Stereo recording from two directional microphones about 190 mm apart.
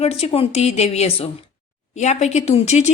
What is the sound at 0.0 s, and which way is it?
Speech, 30° left (ahead or behind).